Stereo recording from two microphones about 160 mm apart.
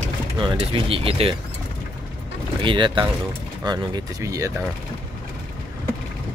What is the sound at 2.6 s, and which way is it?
Speech, 30° right (ahead or behind).